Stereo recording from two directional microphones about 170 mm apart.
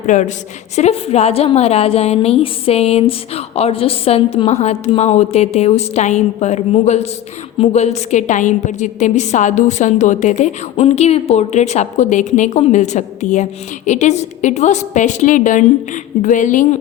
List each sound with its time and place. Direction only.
0.0 s a woman's voice: 45° left (ahead or behind)